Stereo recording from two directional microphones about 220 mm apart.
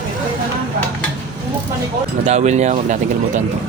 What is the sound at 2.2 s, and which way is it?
Speech, 30° right (ahead or behind).